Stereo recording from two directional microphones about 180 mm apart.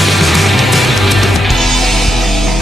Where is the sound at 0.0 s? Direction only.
Centre (ahead or behind).